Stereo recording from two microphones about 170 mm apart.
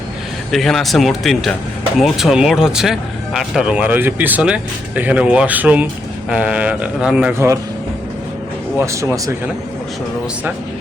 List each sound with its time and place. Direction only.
0.5 s speech: centre (ahead or behind); by 7.6 s 15° right (ahead or behind)
8.9 s speech: 20° right (ahead or behind)